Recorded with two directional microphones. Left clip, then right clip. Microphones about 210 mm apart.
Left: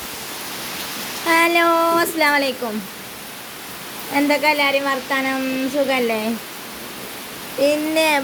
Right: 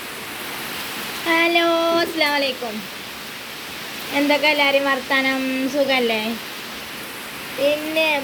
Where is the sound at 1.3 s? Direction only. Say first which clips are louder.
Left 2 dB; 5° left (ahead or behind).